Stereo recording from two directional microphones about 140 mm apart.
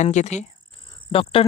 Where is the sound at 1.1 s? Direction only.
40° left (ahead or behind).